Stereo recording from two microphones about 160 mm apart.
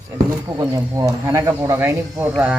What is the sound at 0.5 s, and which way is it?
Speech, 20° right (ahead or behind).